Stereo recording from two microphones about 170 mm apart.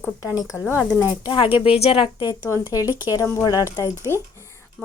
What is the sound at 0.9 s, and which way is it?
Speech, 25° left (ahead or behind).